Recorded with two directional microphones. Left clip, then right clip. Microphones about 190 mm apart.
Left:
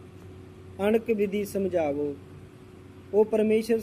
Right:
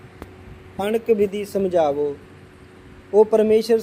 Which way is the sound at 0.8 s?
20° right (ahead or behind).